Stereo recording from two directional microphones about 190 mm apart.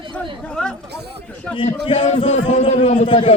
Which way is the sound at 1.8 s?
30° left (ahead or behind).